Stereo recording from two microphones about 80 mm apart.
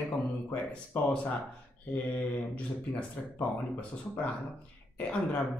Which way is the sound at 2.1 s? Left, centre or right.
Centre.